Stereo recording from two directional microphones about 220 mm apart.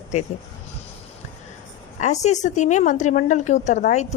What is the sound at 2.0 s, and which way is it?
A woman's voice, 30° left (ahead or behind).